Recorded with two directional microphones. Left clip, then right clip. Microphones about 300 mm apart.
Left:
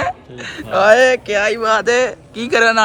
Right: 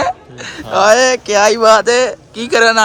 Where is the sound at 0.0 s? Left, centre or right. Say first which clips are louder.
Right 4 dB; centre.